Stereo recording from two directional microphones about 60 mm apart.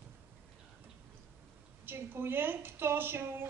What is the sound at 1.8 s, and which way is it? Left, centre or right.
A woman's voice, right.